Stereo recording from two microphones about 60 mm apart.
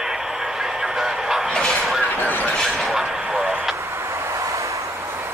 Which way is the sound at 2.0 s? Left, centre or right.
Left.